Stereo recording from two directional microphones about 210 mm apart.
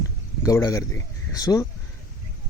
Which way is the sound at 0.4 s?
15° left (ahead or behind).